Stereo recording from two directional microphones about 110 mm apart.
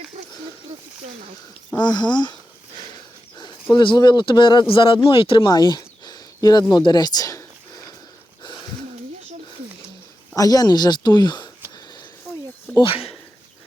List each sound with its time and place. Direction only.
1.8 s speech: 40° left (ahead or behind)
5.5 s speech: 40° left (ahead or behind)
8.4 s a sound: 45° left (ahead or behind)
10.3 s speech: 35° left (ahead or behind)
12.8 s speech: 55° left (ahead or behind)